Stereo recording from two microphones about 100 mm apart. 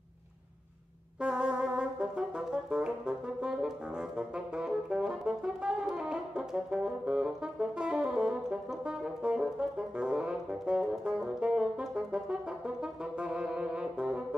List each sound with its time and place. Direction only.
1.2 s brass instrument: 10° right (ahead or behind)